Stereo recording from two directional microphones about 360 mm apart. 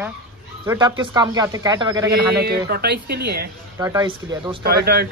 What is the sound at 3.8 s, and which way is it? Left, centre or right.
Speech, centre.